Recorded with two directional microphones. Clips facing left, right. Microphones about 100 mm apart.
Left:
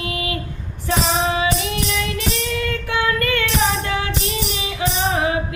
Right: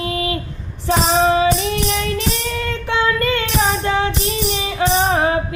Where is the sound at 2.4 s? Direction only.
30° right (ahead or behind).